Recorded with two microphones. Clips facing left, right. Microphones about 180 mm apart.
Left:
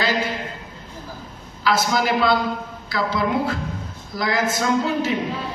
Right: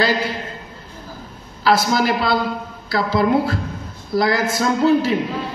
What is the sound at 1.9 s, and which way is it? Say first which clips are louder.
A woman's voice: right 1 dB; 35° right (ahead or behind).